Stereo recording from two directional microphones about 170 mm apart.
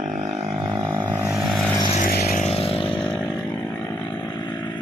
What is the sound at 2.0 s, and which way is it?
Vehicle, 55° left (ahead or behind).